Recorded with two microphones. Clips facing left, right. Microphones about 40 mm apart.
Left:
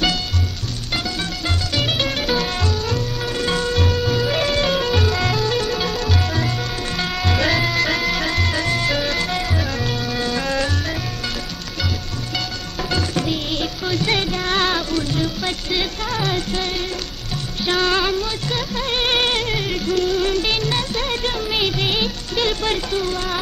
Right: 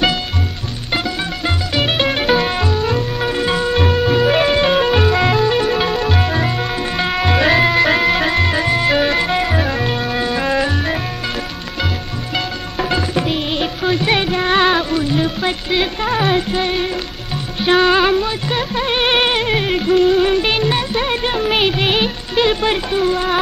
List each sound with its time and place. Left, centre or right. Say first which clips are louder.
0.9 s music: right 5 dB; right
12.4 s music: right 6 dB; right